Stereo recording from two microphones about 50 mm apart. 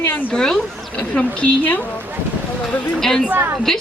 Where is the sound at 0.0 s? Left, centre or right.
Left.